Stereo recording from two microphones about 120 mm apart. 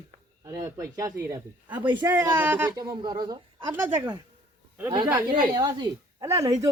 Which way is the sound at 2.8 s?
30° right (ahead or behind).